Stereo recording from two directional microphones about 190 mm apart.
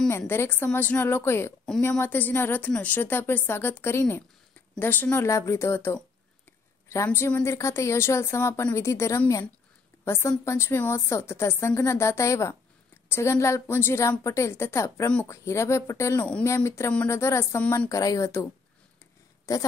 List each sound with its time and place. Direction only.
0.3 s a woman's voice: 10° left (ahead or behind)